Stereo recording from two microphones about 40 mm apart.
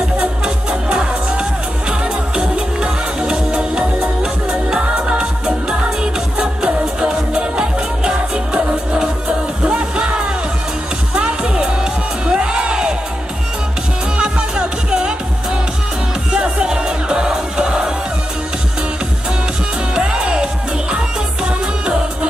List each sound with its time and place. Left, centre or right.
0.7 s music: right
9.6 s music: right
14.1 s music: right
16.3 s music: right
20.0 s music: right